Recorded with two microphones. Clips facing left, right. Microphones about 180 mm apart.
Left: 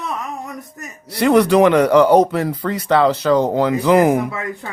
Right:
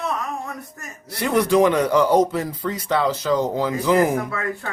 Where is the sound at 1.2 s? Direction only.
70° left (ahead or behind).